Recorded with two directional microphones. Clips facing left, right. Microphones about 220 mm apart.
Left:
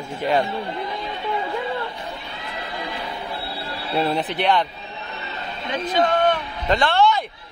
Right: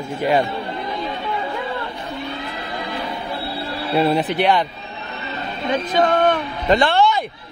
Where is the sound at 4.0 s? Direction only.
10° right (ahead or behind).